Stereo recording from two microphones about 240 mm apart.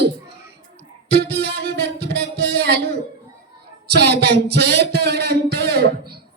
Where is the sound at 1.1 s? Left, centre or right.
Right.